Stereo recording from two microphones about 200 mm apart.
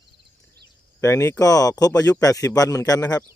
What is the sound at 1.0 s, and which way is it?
Speech, 15° left (ahead or behind).